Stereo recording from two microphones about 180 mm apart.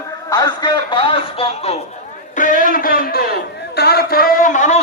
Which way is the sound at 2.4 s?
45° left (ahead or behind).